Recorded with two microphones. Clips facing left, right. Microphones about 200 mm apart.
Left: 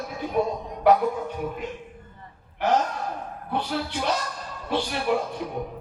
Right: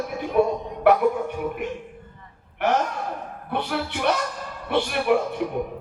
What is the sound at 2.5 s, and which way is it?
Speech, 65° right (ahead or behind).